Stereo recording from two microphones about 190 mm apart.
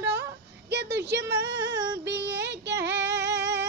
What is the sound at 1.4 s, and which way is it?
Female singing, 65° right (ahead or behind).